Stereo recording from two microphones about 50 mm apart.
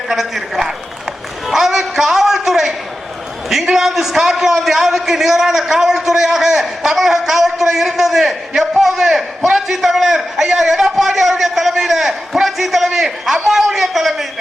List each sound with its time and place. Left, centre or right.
0.1 s a man's voice: centre
1.5 s music: centre
3.5 s a man's voice: centre